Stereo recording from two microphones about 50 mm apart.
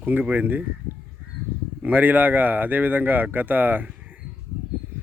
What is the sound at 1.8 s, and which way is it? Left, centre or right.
Speech, right.